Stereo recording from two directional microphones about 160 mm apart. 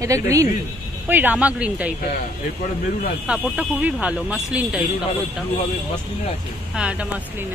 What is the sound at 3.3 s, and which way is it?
Speech, 10° right (ahead or behind).